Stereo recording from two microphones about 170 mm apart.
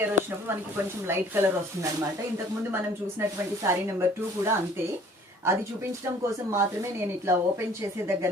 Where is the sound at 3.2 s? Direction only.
15° right (ahead or behind).